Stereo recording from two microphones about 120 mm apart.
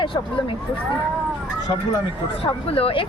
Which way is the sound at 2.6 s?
50° left (ahead or behind).